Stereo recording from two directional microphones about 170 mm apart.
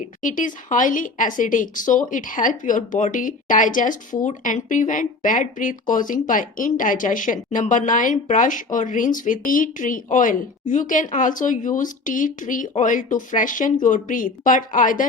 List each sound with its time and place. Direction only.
0.2 s a woman's voice: 50° left (ahead or behind)